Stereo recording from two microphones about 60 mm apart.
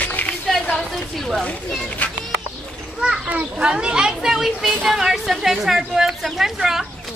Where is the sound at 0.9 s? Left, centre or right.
Centre.